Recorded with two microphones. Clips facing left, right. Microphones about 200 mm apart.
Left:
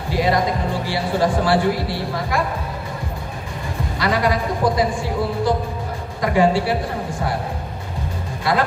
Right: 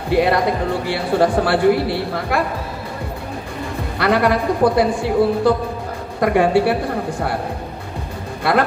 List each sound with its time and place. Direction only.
0.1 s speech: 65° right (ahead or behind)
4.0 s speech: 60° right (ahead or behind)